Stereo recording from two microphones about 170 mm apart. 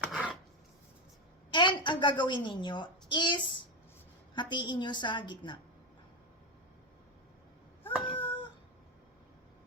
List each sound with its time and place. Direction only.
0.1 s filing: 5° right (ahead or behind)
1.5 s a woman's voice: 25° left (ahead or behind)
8.1 s cat: 10° left (ahead or behind)